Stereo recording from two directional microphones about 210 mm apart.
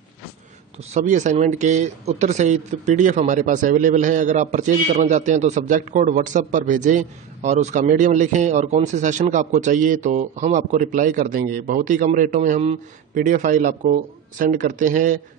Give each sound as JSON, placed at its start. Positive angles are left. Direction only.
{"t": 0.9, "sound": "a man's voice", "side_deg": -35}